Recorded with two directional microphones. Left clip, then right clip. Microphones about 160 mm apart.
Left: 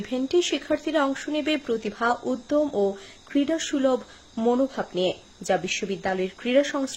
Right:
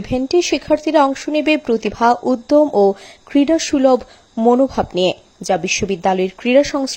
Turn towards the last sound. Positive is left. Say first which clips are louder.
# right 8 dB
turn(degrees=-40)  # may be behind; listen again after turning